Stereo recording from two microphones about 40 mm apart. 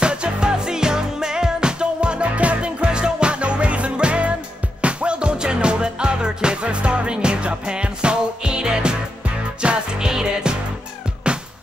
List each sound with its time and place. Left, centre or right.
0.0 s music: right